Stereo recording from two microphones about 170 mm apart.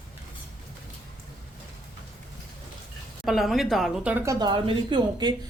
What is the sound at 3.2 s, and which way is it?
Speech, centre (ahead or behind).